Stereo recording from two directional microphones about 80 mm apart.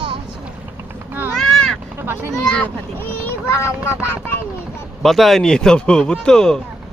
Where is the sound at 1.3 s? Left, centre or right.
Centre.